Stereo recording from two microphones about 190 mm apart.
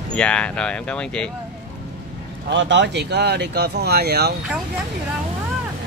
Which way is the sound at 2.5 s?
65° right (ahead or behind).